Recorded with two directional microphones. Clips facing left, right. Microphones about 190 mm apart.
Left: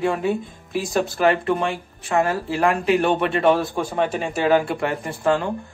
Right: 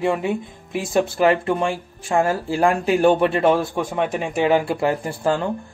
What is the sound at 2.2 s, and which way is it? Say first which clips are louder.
A man's voice: right 2 dB; 30° right (ahead or behind).